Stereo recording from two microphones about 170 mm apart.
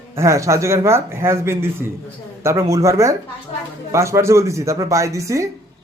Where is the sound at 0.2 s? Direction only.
15° right (ahead or behind).